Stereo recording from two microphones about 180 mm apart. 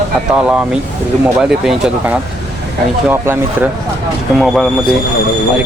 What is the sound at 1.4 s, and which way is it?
Speech, 5° right (ahead or behind).